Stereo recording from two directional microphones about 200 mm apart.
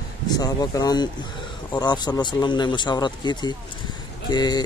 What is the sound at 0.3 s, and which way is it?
Speech, 20° left (ahead or behind).